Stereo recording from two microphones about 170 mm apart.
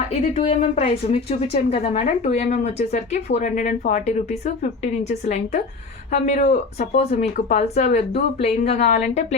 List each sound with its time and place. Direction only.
0.3 s a woman's voice: 40° left (ahead or behind)